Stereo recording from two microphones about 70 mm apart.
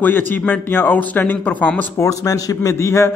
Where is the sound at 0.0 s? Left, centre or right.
Left.